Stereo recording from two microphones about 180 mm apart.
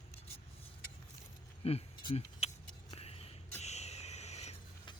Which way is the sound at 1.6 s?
35° left (ahead or behind).